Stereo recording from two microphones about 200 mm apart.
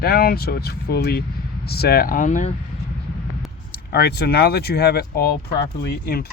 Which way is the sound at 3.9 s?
55° left (ahead or behind).